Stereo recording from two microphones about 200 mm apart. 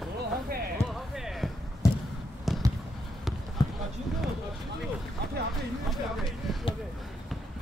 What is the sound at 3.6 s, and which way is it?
Basketball bounce, 20° left (ahead or behind).